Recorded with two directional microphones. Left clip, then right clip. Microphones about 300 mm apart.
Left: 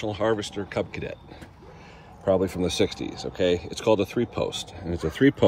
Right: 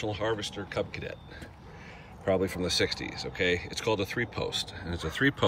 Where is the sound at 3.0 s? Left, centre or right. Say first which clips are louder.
Left 5 dB; centre.